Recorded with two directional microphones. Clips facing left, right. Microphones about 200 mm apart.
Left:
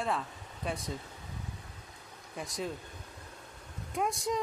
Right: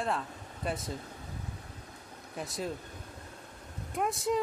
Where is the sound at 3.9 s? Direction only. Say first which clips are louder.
Right 2 dB; centre (ahead or behind).